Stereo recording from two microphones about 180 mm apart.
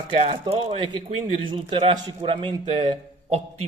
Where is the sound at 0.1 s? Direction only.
35° right (ahead or behind).